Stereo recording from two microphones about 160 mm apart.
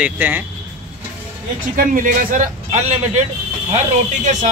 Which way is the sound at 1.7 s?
60° right (ahead or behind).